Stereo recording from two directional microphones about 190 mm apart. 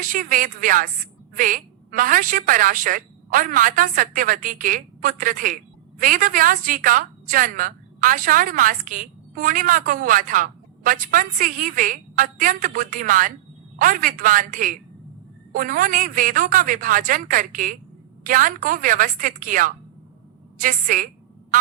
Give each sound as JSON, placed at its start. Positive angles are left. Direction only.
{"t": 0.0, "sound": "a woman's voice", "side_deg": -45}